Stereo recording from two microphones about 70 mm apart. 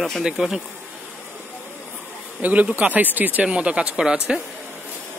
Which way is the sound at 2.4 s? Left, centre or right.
Right.